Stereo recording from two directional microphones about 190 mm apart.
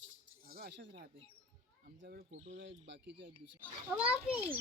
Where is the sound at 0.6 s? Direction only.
55° right (ahead or behind).